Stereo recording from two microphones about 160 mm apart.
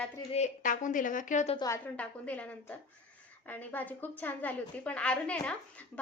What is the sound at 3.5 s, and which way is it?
A woman's voice, 10° left (ahead or behind).